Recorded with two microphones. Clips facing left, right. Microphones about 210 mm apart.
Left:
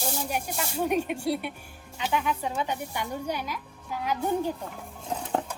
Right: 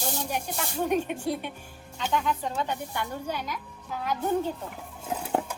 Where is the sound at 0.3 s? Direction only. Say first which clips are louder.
Left 1 dB; 10° left (ahead or behind).